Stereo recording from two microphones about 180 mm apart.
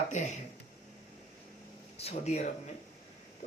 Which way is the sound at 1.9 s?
35° left (ahead or behind).